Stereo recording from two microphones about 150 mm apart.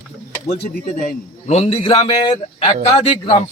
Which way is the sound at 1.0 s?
50° left (ahead or behind).